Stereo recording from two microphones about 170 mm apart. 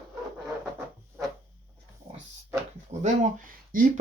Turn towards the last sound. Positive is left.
turn(degrees=-45)  # may be behind; listen again after turning